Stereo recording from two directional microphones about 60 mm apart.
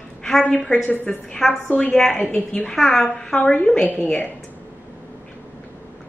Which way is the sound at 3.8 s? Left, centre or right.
Left.